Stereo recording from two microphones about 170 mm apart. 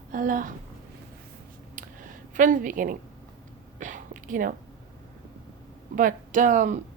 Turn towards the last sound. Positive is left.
turn(degrees=-45)  # may be behind; listen again after turning